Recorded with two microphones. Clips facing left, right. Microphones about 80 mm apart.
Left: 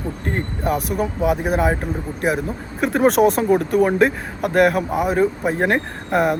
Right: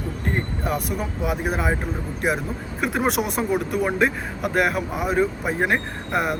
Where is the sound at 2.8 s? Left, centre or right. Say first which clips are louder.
Left 8 dB; left.